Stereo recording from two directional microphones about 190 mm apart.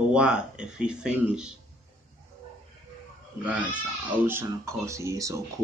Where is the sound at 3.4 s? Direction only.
5° right (ahead or behind).